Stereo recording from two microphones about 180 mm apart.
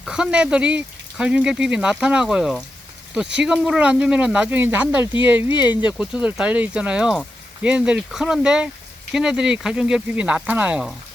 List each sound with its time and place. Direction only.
0.0 s speech: 5° right (ahead or behind)
5.5 s speech: 25° left (ahead or behind)
5.7 s speech: 5° right (ahead or behind)